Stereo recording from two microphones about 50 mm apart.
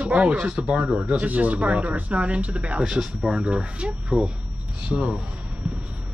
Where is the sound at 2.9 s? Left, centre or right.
Centre.